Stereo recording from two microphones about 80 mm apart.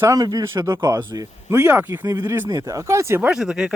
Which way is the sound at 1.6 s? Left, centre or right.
Right.